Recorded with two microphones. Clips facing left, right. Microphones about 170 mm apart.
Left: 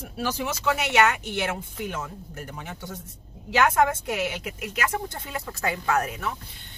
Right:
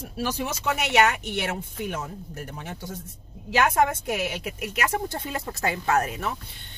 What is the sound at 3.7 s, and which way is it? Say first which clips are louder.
Speech: even; 20° right (ahead or behind).